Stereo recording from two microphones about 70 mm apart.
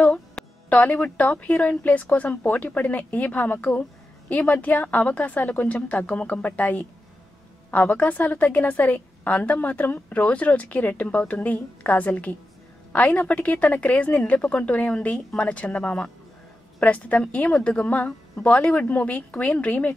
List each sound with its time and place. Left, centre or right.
0.7 s a woman's voice: left